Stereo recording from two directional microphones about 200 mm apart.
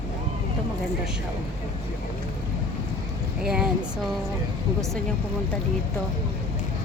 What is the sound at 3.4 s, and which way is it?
Speech, 5° right (ahead or behind).